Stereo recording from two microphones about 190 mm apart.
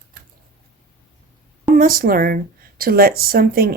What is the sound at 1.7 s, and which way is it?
Speech, 50° right (ahead or behind).